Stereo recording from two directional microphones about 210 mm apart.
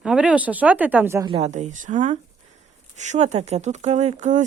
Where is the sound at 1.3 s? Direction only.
30° right (ahead or behind).